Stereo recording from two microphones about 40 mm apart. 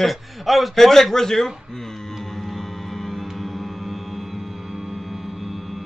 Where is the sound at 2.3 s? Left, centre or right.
Centre.